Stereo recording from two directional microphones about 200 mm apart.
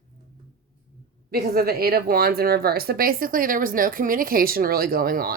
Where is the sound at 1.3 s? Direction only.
50° right (ahead or behind).